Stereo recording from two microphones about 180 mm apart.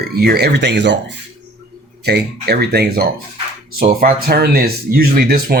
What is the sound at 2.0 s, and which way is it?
Speech, 65° right (ahead or behind).